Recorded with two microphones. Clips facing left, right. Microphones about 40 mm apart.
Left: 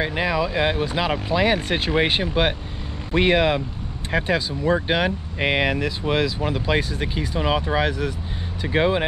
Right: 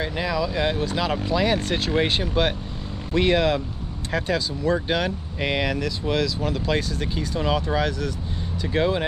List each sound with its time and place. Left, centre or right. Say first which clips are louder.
0.0 s speech: left 3 dB; left